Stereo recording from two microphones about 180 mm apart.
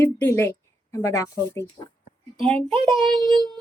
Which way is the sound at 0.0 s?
10° left (ahead or behind).